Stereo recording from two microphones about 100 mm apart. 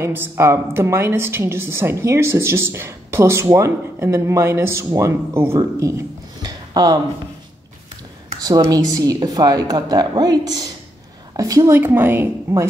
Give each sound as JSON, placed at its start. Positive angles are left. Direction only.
{"t": 0.0, "sound": "a woman's voice", "side_deg": -25}
{"t": 8.5, "sound": "a woman's voice", "side_deg": -40}
{"t": 11.7, "sound": "a woman's voice", "side_deg": -20}